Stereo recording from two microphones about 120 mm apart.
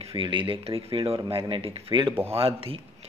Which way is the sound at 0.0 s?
45° right (ahead or behind).